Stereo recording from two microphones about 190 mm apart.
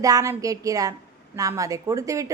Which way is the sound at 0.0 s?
20° right (ahead or behind).